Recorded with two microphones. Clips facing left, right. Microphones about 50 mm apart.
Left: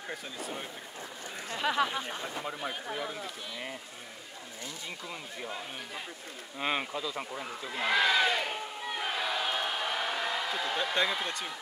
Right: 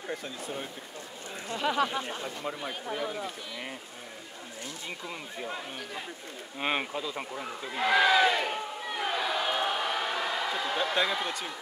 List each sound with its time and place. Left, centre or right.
0.1 s speech: centre
5.0 s speech: centre
6.6 s speech: centre
7.3 s speech: centre